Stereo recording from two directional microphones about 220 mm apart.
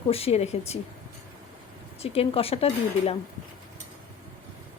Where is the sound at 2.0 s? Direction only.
25° left (ahead or behind).